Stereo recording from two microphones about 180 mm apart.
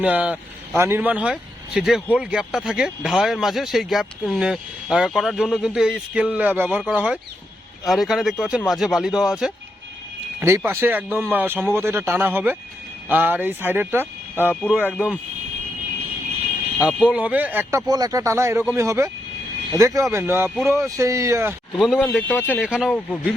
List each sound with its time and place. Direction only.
0.0 s speech: 5° right (ahead or behind)
10.4 s speech: 15° right (ahead or behind)
16.8 s speech: 5° right (ahead or behind)
21.8 s speech: centre (ahead or behind)